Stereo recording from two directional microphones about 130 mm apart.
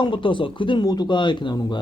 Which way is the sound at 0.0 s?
40° left (ahead or behind).